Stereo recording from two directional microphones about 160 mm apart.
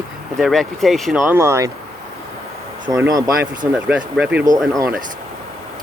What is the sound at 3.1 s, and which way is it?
Speech, 20° right (ahead or behind).